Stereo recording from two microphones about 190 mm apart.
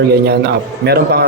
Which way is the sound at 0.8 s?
55° right (ahead or behind).